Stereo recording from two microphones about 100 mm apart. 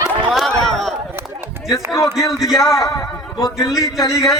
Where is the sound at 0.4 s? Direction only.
5° left (ahead or behind).